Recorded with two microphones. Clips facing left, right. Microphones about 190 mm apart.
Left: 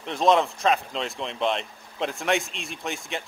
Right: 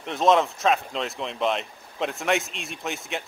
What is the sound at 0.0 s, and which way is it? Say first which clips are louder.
Speech: right 1 dB; centre (ahead or behind).